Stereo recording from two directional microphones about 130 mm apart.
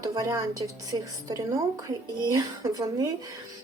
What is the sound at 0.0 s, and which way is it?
A woman's voice, 25° right (ahead or behind).